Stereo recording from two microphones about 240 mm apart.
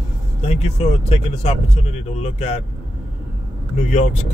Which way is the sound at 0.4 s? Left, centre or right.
Left.